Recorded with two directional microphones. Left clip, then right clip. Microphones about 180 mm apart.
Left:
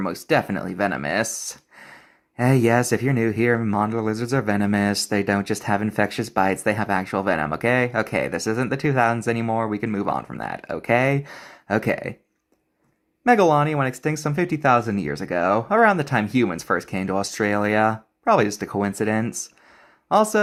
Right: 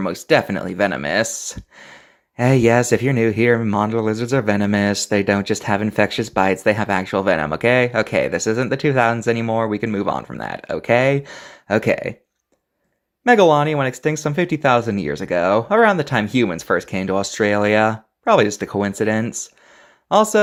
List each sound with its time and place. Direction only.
0.0 s speech: 30° right (ahead or behind)
13.2 s speech: 30° right (ahead or behind)